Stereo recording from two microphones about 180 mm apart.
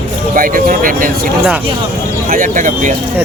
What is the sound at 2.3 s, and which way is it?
Speech, 45° right (ahead or behind).